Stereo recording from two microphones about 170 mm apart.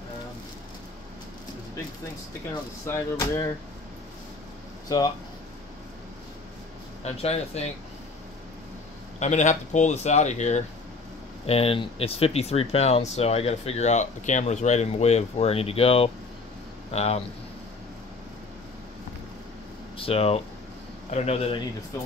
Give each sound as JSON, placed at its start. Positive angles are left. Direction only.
{"t": 2.9, "sound": "speech", "side_deg": 20}
{"t": 4.8, "sound": "speech", "side_deg": 25}
{"t": 7.1, "sound": "speech", "side_deg": 35}
{"t": 9.2, "sound": "speech", "side_deg": 45}
{"t": 20.0, "sound": "speech", "side_deg": 35}